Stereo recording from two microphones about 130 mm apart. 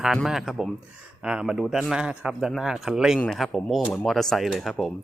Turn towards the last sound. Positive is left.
turn(degrees=0)  # may be behind; listen again after turning